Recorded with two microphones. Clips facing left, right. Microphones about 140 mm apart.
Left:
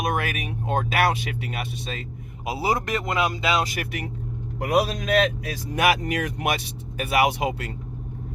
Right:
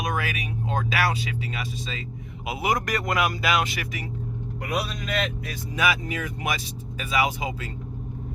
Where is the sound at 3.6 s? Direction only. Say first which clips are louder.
Left 2 dB; 50° left (ahead or behind).